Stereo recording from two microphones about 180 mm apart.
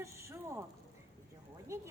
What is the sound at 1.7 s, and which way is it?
Speech, 15° right (ahead or behind).